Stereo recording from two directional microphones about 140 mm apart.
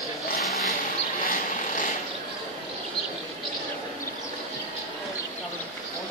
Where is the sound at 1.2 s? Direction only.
90° left.